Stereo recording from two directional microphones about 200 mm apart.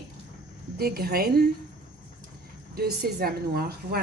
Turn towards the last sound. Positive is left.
turn(degrees=-50)  # may be behind; listen again after turning